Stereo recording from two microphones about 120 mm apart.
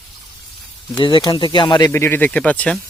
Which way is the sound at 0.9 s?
40° left (ahead or behind).